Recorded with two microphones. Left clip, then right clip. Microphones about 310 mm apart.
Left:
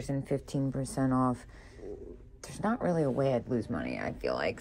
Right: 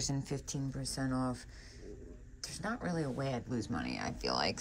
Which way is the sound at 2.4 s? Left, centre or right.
Centre.